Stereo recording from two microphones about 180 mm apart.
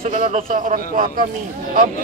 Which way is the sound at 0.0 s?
40° right (ahead or behind).